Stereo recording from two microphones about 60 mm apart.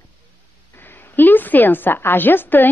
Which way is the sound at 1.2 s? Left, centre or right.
Left.